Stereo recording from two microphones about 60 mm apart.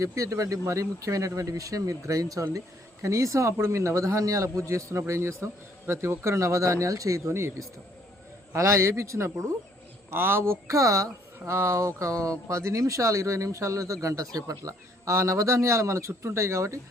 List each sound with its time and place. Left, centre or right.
0.0 s speech: right
8.5 s speech: right
10.1 s speech: right
10.7 s speech: right
11.4 s speech: right